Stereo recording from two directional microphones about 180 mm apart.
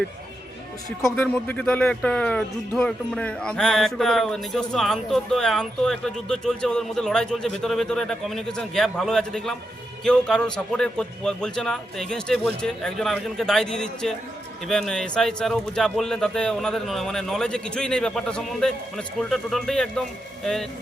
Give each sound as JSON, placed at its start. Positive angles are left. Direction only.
{"t": 1.0, "sound": "speech", "side_deg": 10}